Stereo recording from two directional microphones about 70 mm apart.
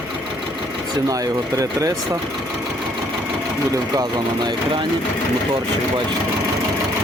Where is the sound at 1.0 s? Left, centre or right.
Right.